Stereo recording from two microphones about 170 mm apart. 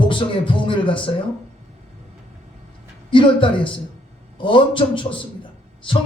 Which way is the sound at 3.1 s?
30° left (ahead or behind).